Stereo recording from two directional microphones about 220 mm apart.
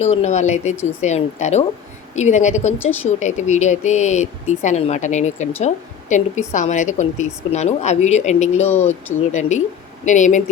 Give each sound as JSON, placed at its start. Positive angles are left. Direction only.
{"t": 0.0, "sound": "speech", "side_deg": 30}
{"t": 2.7, "sound": "speech", "side_deg": 10}
{"t": 3.2, "sound": "speech", "side_deg": 30}